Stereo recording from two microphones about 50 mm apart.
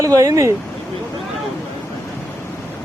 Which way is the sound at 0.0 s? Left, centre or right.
Right.